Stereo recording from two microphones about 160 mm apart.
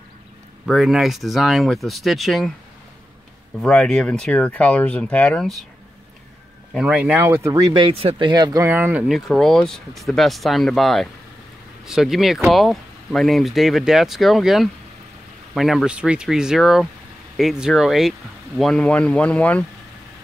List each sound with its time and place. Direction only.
0.7 s speech: centre (ahead or behind)
3.6 s speech: 5° left (ahead or behind)
6.7 s speech: 5° right (ahead or behind); by 8.6 s 25° right (ahead or behind)
8.6 s speech: 10° right (ahead or behind); by 19.6 s 10° left (ahead or behind)